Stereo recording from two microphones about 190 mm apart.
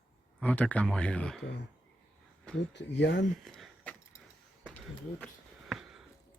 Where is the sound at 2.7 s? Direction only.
65° left (ahead or behind).